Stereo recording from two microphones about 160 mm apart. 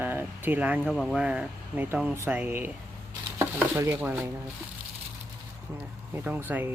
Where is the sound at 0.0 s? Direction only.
10° right (ahead or behind).